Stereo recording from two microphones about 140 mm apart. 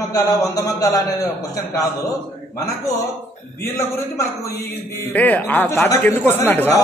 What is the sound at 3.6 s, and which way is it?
A man's voice, 20° left (ahead or behind).